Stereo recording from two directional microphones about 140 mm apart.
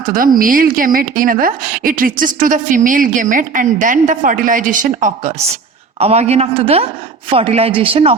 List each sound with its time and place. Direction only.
0.0 s a woman's voice: 90° right; by 5.3 s 60° right (ahead or behind)
6.0 s a woman's voice: 50° right (ahead or behind)